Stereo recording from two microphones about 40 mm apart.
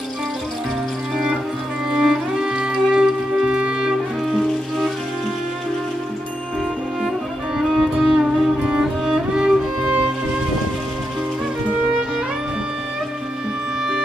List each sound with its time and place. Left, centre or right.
1.9 s music: centre
4.3 s music: centre
7.5 s music: centre